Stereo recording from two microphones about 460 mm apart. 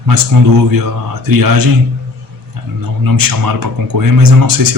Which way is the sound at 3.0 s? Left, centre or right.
Right.